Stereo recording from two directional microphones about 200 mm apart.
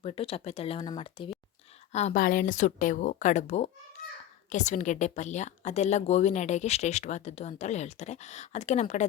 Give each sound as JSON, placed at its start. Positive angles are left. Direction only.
{"t": 0.0, "sound": "speech", "side_deg": 30}
{"t": 1.9, "sound": "speech", "side_deg": 35}